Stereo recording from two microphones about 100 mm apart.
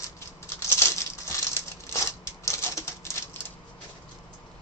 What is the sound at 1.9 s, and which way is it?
Typewriter, 30° left (ahead or behind).